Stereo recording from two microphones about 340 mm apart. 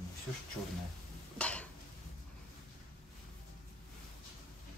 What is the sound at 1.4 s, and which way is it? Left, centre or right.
Dishes, centre.